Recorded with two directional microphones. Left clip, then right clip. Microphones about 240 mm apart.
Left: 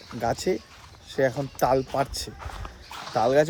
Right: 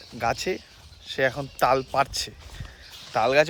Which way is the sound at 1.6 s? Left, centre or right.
Centre.